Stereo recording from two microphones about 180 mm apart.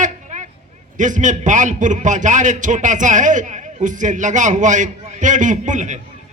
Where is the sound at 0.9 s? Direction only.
45° right (ahead or behind).